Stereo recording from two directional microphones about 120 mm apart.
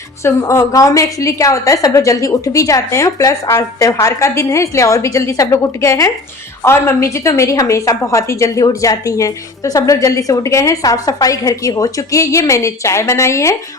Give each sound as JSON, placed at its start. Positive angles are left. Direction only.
{"t": 0.2, "sound": "a woman's voice", "side_deg": 25}